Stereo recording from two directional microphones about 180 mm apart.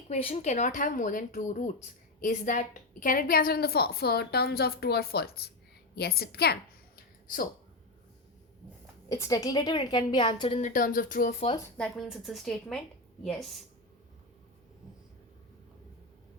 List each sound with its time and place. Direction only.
0.1 s a woman's voice: 35° left (ahead or behind); by 7.4 s 55° left (ahead or behind)
9.0 s a woman's voice: 15° left (ahead or behind)
10.6 s speech: 50° left (ahead or behind)
11.6 s speech: centre (ahead or behind)